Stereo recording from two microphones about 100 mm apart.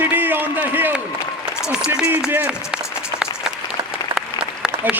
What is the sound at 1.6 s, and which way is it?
Speech, 10° right (ahead or behind).